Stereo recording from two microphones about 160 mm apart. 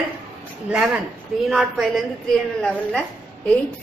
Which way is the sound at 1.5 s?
Centre (ahead or behind).